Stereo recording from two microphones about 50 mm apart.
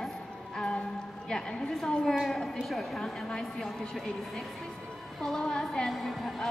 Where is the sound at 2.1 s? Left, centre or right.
Centre.